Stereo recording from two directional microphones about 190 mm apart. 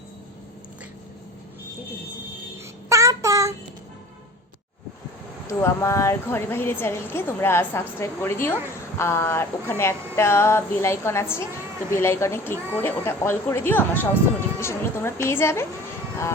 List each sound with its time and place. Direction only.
2.9 s child singing: 15° right (ahead or behind)
5.5 s speech: 15° left (ahead or behind)